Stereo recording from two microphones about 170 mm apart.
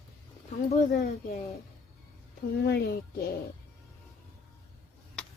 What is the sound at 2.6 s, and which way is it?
Speech, 70° left (ahead or behind).